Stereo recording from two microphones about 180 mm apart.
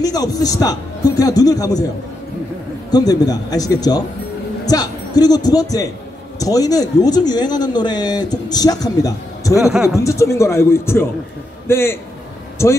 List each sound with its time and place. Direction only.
0.0 s a man's voice: 20° left (ahead or behind)
2.9 s speech: 20° left (ahead or behind)
9.7 s speech: centre (ahead or behind)
9.9 s a man's voice: 15° left (ahead or behind)